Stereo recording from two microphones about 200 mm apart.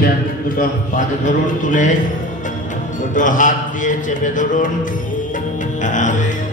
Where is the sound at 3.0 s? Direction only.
40° left (ahead or behind).